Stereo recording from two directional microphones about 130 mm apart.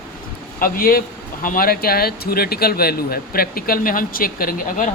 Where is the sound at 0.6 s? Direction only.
90° left.